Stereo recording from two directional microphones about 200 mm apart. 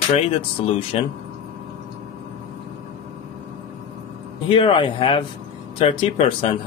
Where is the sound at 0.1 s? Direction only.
25° left (ahead or behind).